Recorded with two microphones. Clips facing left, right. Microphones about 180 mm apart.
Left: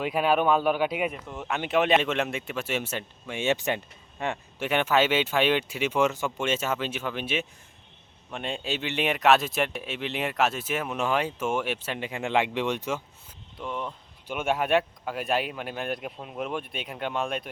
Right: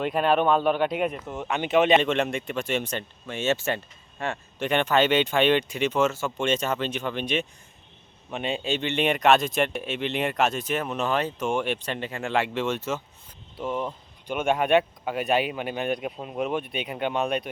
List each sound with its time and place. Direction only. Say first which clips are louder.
0.0 s speech: right 1 dB; 5° left (ahead or behind)
4.7 s speech: right 2 dB; 5° left (ahead or behind)
14.3 s speech: right 3 dB; 5° left (ahead or behind)